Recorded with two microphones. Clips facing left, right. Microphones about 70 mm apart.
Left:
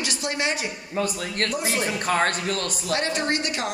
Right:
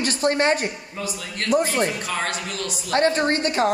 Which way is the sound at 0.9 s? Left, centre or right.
Left.